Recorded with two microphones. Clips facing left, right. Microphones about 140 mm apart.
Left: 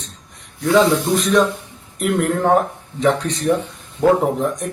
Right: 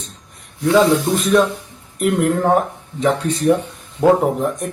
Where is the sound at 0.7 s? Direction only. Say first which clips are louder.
Right 1 dB; 5° right (ahead or behind).